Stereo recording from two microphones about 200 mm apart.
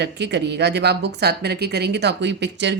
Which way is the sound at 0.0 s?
60° right (ahead or behind).